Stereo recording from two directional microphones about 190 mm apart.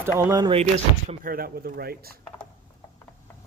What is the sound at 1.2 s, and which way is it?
Speech, 50° right (ahead or behind).